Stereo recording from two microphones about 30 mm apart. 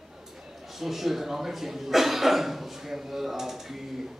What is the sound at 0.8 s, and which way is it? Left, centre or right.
Speech, centre.